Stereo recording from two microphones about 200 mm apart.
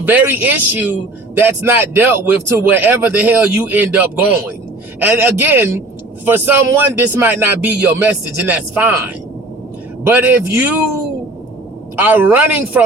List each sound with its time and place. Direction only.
0.0 s a man's voice: 10° right (ahead or behind)
11.9 s a man's voice: 10° right (ahead or behind)